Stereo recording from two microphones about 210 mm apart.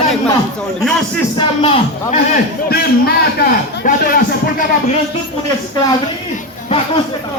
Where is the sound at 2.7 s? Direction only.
50° left (ahead or behind).